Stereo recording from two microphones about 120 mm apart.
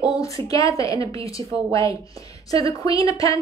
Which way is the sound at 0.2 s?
30° left (ahead or behind).